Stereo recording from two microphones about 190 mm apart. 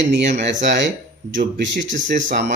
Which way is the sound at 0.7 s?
70° right (ahead or behind).